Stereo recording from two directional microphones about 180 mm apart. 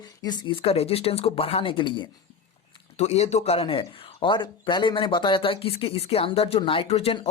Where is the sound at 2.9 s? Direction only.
35° left (ahead or behind).